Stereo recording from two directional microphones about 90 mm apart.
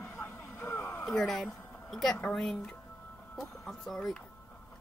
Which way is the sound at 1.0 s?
5° left (ahead or behind).